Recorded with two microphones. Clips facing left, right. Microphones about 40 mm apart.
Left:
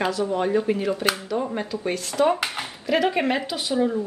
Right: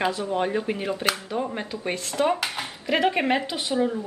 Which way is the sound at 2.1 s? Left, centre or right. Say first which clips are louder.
Left 3 dB; centre.